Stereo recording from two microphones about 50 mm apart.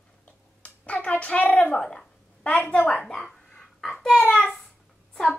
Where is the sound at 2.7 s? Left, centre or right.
Left.